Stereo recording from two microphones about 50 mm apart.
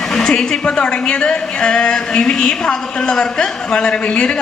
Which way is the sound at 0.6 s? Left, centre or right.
Centre.